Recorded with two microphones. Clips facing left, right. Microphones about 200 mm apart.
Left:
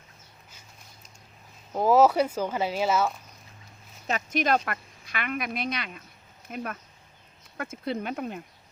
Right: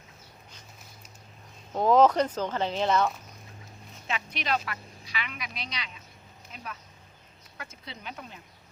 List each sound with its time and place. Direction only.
1.7 s speech: 5° left (ahead or behind)
4.0 s speech: 45° left (ahead or behind)